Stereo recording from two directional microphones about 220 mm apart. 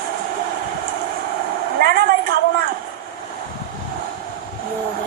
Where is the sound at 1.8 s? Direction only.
45° right (ahead or behind).